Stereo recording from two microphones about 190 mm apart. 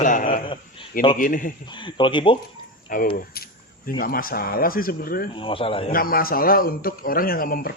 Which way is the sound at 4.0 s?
50° left (ahead or behind).